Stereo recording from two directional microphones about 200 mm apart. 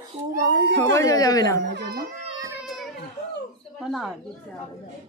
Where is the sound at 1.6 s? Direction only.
60° right (ahead or behind).